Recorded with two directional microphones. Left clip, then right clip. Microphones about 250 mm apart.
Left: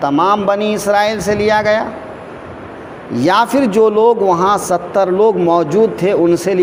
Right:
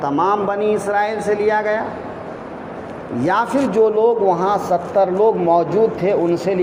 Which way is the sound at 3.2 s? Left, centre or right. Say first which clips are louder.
Left 5 dB; left.